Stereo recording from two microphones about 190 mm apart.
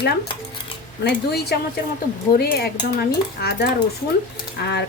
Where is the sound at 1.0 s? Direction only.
60° left (ahead or behind).